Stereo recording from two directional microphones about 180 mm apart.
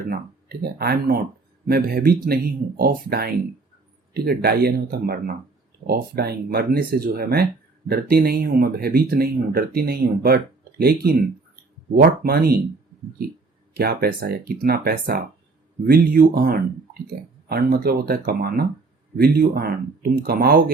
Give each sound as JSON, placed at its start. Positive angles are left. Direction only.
{"t": 0.1, "sound": "speech", "side_deg": -60}